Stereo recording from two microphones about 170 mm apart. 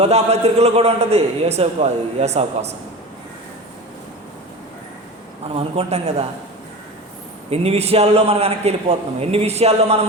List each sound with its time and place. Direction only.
0.0 s a man's voice: 40° right (ahead or behind)
5.5 s a man's voice: 40° right (ahead or behind)
7.5 s a man's voice: 35° right (ahead or behind)